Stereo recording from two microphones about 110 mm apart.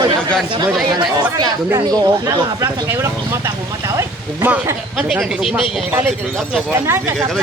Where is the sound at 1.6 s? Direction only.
30° right (ahead or behind).